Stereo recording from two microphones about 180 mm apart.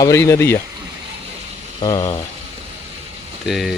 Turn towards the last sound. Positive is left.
turn(degrees=0)  # may be behind; listen again after turning